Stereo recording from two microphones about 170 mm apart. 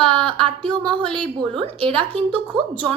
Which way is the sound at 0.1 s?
30° right (ahead or behind).